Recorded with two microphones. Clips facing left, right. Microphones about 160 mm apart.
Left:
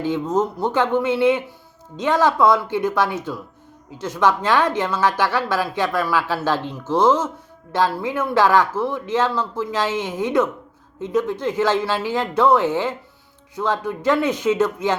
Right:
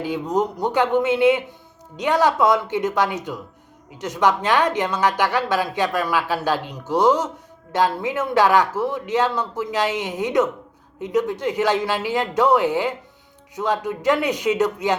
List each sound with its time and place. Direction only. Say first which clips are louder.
0.0 s a woman's voice: left 1 dB; 15° right (ahead or behind)